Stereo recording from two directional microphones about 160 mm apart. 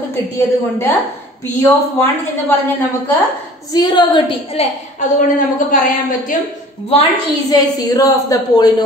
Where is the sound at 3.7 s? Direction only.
30° left (ahead or behind).